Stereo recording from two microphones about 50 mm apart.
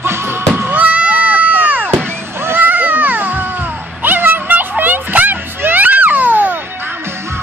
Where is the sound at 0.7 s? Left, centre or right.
Right.